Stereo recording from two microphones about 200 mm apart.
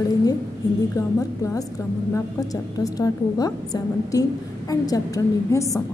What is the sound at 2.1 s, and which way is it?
A woman's voice, 15° left (ahead or behind).